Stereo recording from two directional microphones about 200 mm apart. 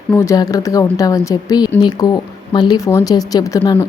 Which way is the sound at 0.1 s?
15° left (ahead or behind).